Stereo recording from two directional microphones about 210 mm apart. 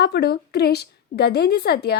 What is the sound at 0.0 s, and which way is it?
A woman's voice, 50° left (ahead or behind).